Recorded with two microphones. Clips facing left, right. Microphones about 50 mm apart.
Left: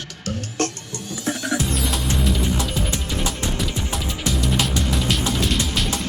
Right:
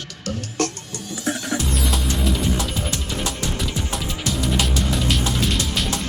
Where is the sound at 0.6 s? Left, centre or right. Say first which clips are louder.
Even; left.